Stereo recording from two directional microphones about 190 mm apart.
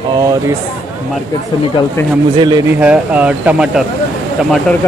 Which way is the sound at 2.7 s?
5° right (ahead or behind).